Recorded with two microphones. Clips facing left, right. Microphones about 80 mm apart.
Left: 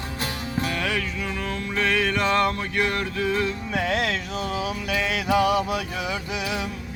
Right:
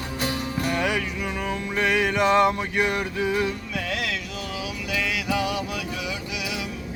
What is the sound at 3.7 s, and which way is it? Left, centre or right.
Music, left.